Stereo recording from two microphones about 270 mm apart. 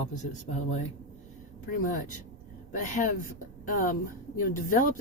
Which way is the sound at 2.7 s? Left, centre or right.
Left.